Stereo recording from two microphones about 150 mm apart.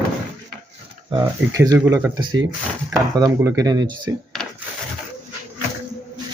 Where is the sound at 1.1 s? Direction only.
20° right (ahead or behind).